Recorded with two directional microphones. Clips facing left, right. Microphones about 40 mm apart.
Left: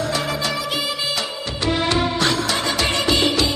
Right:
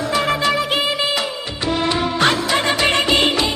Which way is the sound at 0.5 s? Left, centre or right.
Right.